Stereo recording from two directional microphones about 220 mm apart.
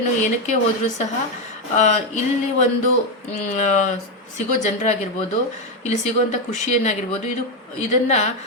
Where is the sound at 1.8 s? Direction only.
30° left (ahead or behind).